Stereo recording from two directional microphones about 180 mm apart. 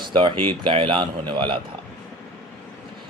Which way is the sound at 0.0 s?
25° right (ahead or behind).